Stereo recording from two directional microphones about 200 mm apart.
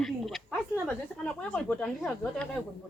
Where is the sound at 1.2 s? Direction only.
5° left (ahead or behind).